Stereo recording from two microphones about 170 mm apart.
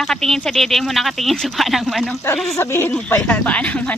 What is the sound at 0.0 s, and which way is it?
Speech, centre (ahead or behind).